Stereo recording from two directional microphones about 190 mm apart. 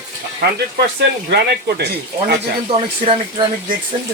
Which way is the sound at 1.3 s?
60° right (ahead or behind).